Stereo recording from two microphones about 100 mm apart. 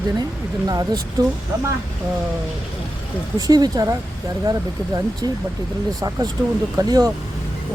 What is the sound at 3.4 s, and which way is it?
Speech, 40° right (ahead or behind).